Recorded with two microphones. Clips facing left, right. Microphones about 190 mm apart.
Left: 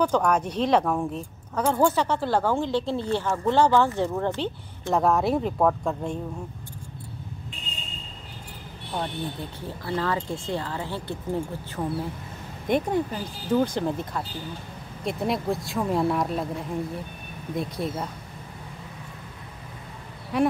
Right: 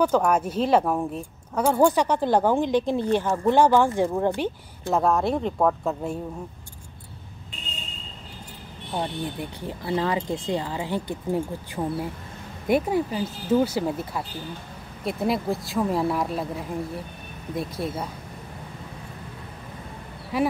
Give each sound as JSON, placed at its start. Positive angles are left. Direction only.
{"t": 0.0, "sound": "speech", "side_deg": -10}
{"t": 4.4, "sound": "speech", "side_deg": 0}
{"t": 8.9, "sound": "speech", "side_deg": -15}
{"t": 20.3, "sound": "speech", "side_deg": 0}